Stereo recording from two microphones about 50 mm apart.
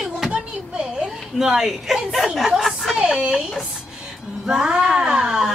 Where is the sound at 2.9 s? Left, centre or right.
Right.